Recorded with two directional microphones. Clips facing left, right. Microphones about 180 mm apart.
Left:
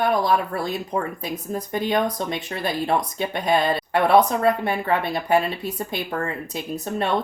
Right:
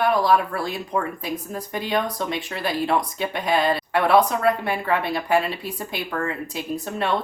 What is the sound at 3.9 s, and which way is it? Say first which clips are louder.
Speech: left 2 dB; 20° left (ahead or behind).